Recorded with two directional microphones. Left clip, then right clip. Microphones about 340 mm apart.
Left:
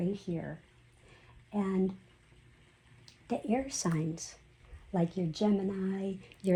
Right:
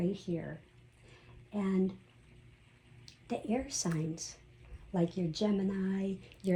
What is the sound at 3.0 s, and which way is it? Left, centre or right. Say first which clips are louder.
Speech: left 3 dB; left.